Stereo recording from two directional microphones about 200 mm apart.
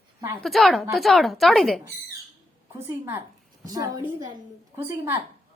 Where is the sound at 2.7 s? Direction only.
10° right (ahead or behind).